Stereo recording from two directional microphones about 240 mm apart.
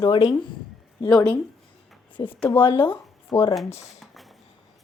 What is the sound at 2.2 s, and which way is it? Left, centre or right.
Speech, centre.